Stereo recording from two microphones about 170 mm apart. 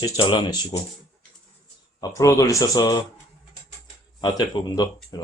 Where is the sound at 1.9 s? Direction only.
20° left (ahead or behind).